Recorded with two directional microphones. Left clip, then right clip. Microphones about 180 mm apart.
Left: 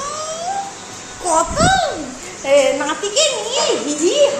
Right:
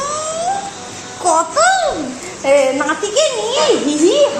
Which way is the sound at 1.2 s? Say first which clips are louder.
Right 3 dB; 20° right (ahead or behind).